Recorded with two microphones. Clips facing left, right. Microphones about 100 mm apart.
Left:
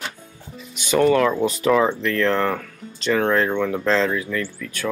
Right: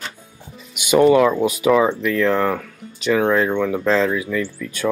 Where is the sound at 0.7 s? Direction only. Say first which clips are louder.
Right 4 dB; 15° right (ahead or behind).